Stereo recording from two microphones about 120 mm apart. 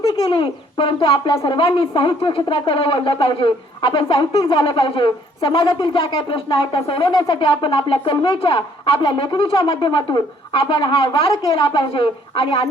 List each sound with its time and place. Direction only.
0.0 s a woman's voice: 35° left (ahead or behind)